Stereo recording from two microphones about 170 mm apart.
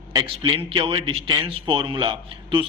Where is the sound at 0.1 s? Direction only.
30° right (ahead or behind).